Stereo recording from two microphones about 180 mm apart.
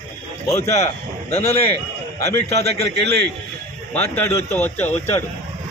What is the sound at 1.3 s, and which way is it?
Speech, 35° left (ahead or behind).